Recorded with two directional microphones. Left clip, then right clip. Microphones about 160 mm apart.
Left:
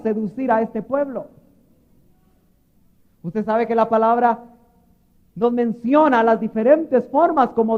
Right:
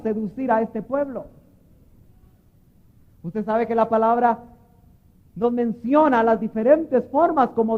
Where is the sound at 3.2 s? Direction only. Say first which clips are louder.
Left 3 dB; 40° right (ahead or behind).